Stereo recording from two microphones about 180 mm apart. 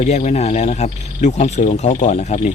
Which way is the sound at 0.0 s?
40° left (ahead or behind).